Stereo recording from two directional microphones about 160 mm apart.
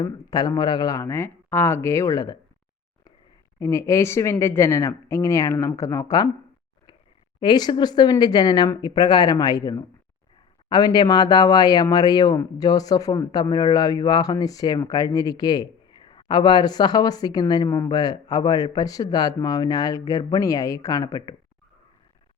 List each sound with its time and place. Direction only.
0.0 s speech: 25° left (ahead or behind)
3.6 s speech: 20° left (ahead or behind)
7.3 s speech: 25° left (ahead or behind)